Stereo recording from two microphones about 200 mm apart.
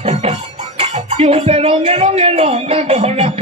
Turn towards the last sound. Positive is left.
turn(degrees=-30)  # may be behind; listen again after turning